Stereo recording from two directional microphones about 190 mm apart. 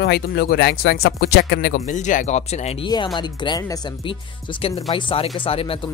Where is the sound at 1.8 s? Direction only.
40° left (ahead or behind).